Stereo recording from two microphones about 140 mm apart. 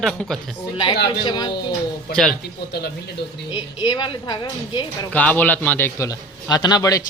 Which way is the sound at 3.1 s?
35° left (ahead or behind).